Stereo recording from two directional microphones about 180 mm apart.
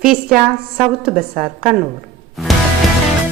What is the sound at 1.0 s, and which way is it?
Speech, 55° right (ahead or behind).